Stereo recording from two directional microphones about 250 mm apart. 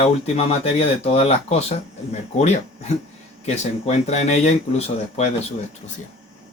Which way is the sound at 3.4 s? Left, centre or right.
Left.